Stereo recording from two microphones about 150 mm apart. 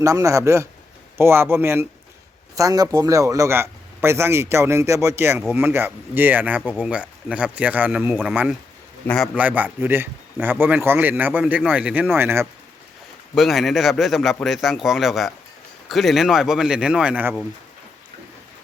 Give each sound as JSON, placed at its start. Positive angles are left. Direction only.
{"t": 0.0, "sound": "speech", "side_deg": -20}
{"t": 9.3, "sound": "speech", "side_deg": -10}
{"t": 13.3, "sound": "speech", "side_deg": 0}